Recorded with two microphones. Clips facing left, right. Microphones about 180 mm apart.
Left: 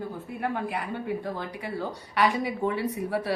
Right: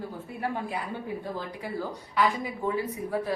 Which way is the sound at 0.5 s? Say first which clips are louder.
Left 2 dB; 65° left (ahead or behind).